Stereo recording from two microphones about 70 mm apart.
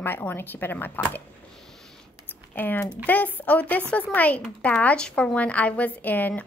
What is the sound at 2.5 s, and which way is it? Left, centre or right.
A woman's voice, left.